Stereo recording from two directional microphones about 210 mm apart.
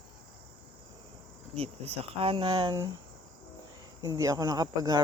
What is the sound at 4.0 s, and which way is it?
Speech, 15° right (ahead or behind).